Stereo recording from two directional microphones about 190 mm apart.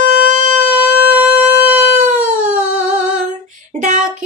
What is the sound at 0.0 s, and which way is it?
Shofar, 45° right (ahead or behind).